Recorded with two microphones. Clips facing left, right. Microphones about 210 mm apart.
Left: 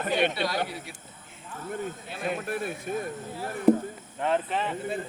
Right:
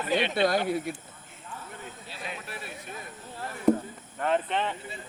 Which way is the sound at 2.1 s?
50° left (ahead or behind).